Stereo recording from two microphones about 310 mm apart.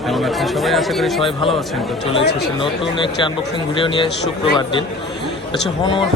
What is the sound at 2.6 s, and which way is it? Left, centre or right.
Speech, centre.